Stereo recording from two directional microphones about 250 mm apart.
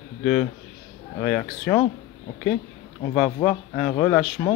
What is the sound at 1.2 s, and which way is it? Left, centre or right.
Speech, centre.